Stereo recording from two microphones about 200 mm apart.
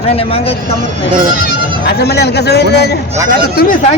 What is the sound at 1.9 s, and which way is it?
A man's voice, 55° left (ahead or behind).